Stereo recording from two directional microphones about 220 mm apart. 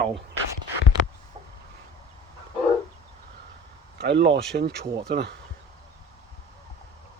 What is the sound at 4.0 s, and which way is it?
Speech, 50° right (ahead or behind).